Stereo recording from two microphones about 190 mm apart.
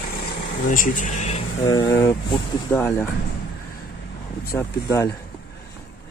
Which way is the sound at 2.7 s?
10° left (ahead or behind).